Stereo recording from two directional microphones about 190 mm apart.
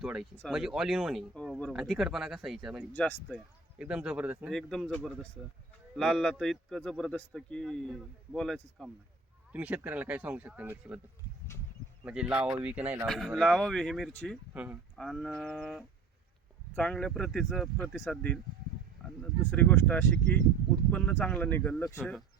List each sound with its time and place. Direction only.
0.0 s speech: 5° right (ahead or behind)
2.9 s speech: 10° left (ahead or behind); by 11.0 s 5° right (ahead or behind)
12.0 s speech: 5° right (ahead or behind); by 21.9 s 10° left (ahead or behind)
21.9 s speech: centre (ahead or behind)